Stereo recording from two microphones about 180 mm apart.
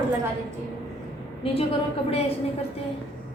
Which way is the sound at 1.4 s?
35° left (ahead or behind).